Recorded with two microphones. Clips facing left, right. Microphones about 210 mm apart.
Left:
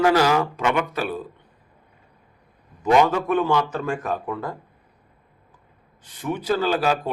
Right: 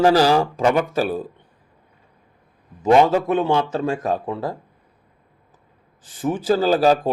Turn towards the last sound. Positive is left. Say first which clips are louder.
# right 5 dB
turn(degrees=-40)  # may be behind; listen again after turning